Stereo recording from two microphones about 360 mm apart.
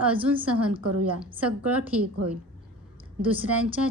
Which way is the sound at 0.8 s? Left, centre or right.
Right.